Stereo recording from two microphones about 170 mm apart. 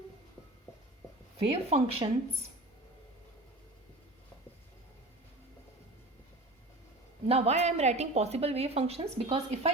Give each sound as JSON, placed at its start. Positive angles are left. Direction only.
{"t": 1.4, "sound": "a woman's voice", "side_deg": -35}
{"t": 7.3, "sound": "a woman's voice", "side_deg": -35}